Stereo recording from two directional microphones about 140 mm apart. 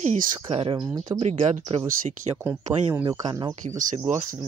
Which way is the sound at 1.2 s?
50° right (ahead or behind).